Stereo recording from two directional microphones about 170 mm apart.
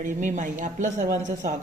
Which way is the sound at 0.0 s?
50° right (ahead or behind).